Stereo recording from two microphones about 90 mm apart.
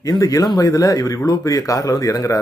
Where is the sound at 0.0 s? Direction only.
40° left (ahead or behind).